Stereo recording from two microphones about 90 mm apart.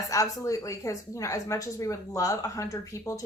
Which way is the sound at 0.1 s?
40° left (ahead or behind).